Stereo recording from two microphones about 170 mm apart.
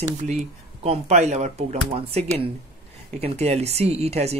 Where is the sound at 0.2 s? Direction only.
45° right (ahead or behind).